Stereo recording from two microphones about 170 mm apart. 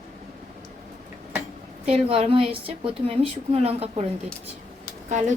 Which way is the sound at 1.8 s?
35° right (ahead or behind).